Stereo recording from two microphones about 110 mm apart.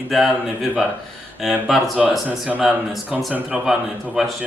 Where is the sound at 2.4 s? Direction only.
15° right (ahead or behind).